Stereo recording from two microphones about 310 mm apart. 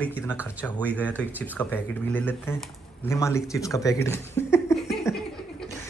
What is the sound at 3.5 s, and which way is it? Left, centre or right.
Chuckle, centre.